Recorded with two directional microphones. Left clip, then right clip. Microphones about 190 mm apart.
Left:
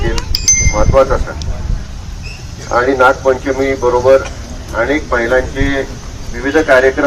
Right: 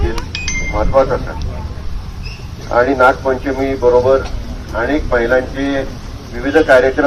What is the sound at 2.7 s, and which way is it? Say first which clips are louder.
Speech: left 1 dB; 35° right (ahead or behind).